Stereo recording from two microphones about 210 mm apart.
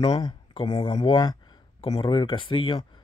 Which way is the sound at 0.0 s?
20° left (ahead or behind).